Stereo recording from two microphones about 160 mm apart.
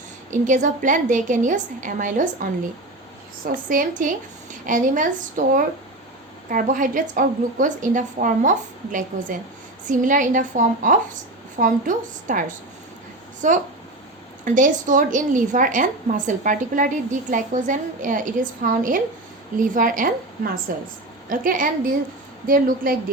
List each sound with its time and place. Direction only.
0.3 s a woman's voice: 50° right (ahead or behind)
3.5 s a woman's voice: 60° right (ahead or behind)